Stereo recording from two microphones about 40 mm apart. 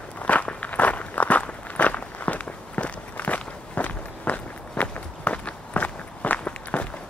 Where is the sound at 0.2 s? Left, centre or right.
Left.